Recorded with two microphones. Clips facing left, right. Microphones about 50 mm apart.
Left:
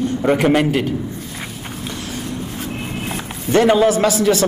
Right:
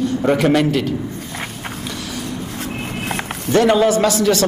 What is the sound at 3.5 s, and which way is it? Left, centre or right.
Speech, centre.